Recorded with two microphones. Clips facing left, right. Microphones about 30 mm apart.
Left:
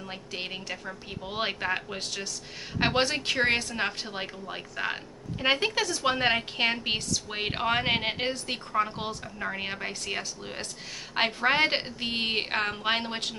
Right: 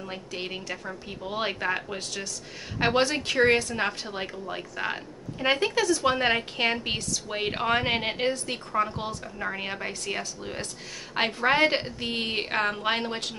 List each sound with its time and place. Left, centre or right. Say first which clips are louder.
0.3 s a woman's voice: even; centre